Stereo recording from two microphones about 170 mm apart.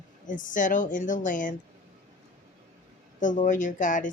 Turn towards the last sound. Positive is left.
turn(degrees=50)  # may be behind; listen again after turning